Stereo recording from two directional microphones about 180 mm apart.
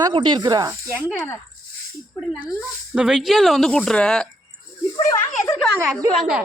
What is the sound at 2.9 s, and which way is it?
Speech, 5° right (ahead or behind).